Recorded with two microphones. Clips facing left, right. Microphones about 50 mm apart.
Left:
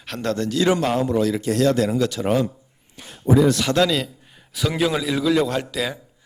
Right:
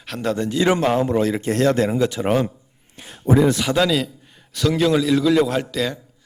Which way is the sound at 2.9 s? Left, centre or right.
Right.